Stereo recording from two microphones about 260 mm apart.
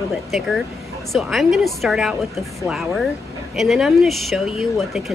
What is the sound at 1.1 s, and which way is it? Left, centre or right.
A woman's voice, centre.